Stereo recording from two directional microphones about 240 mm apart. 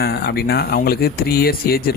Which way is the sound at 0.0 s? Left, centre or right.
Left.